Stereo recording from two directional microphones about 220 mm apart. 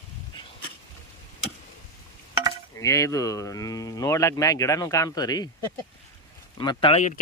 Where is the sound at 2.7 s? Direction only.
15° left (ahead or behind).